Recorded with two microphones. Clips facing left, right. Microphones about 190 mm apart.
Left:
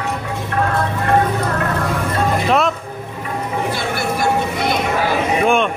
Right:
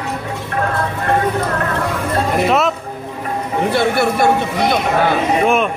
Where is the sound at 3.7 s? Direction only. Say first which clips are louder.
Right 6 dB; 60° right (ahead or behind).